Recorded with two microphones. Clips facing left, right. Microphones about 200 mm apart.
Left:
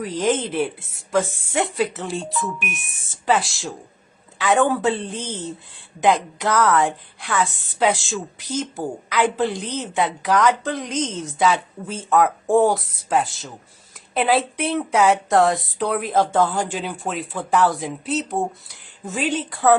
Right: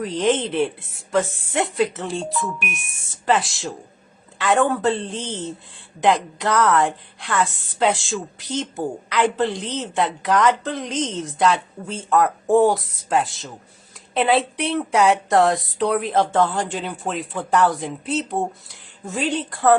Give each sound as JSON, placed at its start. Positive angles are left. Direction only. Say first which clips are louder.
{"t": 0.0, "sound": "a woman's voice", "louder": "right 1 dB", "side_deg": 0}